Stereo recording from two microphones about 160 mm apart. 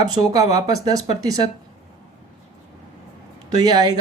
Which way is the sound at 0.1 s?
25° right (ahead or behind).